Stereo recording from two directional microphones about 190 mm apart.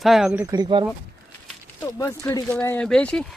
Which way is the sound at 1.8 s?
15° left (ahead or behind).